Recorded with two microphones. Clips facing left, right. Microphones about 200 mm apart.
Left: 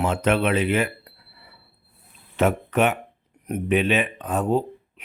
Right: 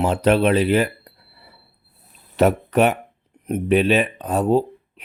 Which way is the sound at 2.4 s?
40° right (ahead or behind).